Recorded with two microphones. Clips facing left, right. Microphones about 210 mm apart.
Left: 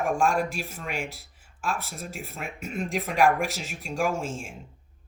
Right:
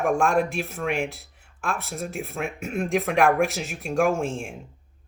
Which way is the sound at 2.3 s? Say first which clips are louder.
Right 4 dB; 60° right (ahead or behind).